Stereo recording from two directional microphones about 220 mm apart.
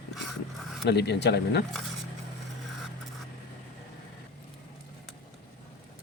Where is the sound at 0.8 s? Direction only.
50° left (ahead or behind).